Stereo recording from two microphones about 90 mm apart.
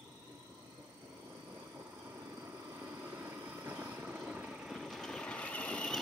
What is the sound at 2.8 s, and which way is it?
Vehicle, 20° right (ahead or behind).